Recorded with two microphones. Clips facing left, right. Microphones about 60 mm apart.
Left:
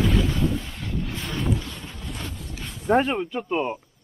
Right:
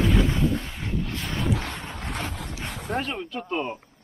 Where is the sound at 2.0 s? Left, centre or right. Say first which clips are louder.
Right 3 dB; right.